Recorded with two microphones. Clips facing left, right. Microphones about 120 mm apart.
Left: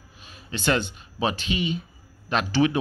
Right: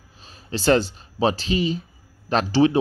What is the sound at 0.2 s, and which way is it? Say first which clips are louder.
Speech: right 4 dB; 35° right (ahead or behind).